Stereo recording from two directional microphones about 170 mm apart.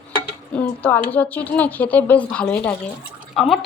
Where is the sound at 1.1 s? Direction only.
10° left (ahead or behind).